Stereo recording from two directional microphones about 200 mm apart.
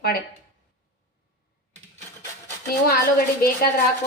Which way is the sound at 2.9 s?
50° left (ahead or behind).